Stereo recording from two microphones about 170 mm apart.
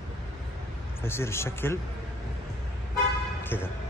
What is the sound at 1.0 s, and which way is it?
Speech, 15° left (ahead or behind).